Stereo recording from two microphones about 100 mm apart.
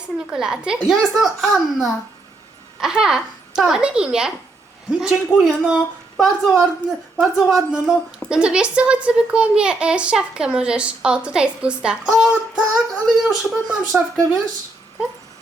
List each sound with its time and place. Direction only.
0.3 s a child's voice: 10° right (ahead or behind)